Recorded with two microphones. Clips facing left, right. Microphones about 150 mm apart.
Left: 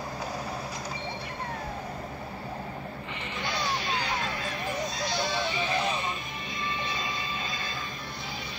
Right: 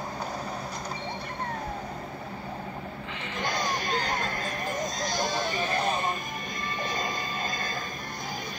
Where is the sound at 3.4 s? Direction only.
45° right (ahead or behind).